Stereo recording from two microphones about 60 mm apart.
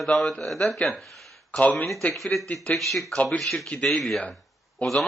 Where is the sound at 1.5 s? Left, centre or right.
Centre.